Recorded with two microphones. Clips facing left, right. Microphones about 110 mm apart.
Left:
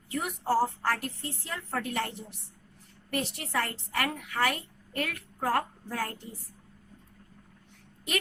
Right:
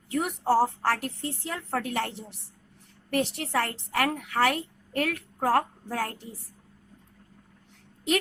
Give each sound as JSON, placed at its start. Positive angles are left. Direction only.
{"t": 0.1, "sound": "a woman's voice", "side_deg": -70}
{"t": 5.5, "sound": "a woman's voice", "side_deg": -70}